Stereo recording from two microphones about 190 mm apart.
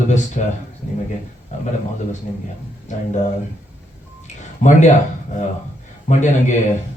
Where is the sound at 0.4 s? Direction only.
40° left (ahead or behind).